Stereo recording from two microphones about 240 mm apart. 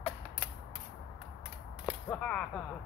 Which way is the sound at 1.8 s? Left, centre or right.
Centre.